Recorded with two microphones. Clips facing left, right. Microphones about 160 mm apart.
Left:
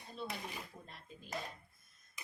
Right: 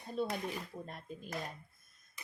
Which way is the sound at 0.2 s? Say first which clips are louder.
Right 8 dB; 45° right (ahead or behind).